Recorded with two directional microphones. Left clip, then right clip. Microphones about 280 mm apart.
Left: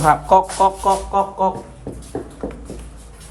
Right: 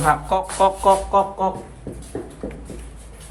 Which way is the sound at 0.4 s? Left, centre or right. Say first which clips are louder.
Even; centre.